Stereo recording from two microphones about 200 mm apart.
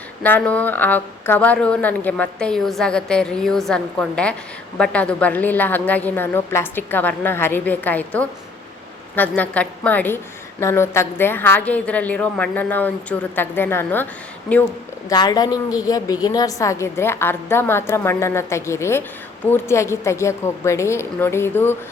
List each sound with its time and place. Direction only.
0.2 s a woman's voice: 10° left (ahead or behind)
15.1 s a woman's voice: 20° left (ahead or behind)